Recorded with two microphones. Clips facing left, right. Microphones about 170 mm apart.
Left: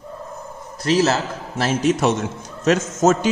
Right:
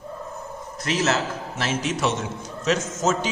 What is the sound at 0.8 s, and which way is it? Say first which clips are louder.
A man's voice: left 5 dB; 35° left (ahead or behind).